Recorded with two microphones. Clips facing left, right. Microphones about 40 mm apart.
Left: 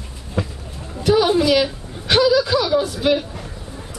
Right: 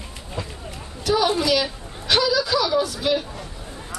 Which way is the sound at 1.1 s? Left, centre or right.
Centre.